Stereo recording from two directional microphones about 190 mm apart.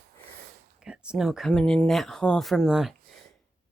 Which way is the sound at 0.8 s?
5° right (ahead or behind).